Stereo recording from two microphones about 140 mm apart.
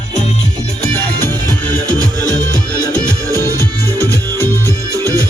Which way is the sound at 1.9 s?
25° right (ahead or behind).